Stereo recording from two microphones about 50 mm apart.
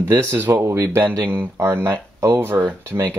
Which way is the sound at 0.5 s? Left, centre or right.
Right.